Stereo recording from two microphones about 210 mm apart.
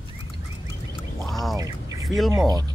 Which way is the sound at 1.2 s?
Centre (ahead or behind).